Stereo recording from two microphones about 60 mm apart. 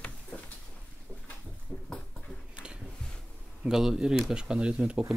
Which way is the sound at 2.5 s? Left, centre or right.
Centre.